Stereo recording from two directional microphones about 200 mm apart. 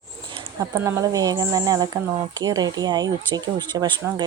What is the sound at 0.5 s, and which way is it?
Speech, 15° right (ahead or behind).